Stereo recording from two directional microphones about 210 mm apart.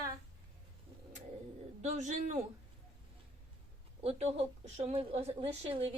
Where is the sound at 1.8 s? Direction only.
35° right (ahead or behind).